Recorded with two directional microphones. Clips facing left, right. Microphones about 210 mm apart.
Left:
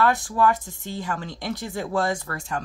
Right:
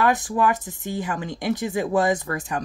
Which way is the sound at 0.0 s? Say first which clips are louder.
Even; 15° right (ahead or behind).